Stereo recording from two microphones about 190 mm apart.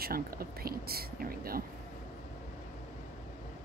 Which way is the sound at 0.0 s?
50° right (ahead or behind).